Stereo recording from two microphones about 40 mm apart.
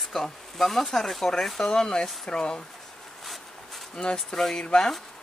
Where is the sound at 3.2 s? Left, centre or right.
Centre.